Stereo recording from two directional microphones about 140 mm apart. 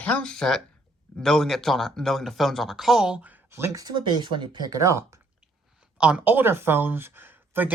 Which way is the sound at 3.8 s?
30° right (ahead or behind).